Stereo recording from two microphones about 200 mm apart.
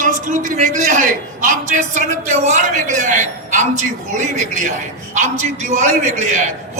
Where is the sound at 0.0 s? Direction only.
40° right (ahead or behind).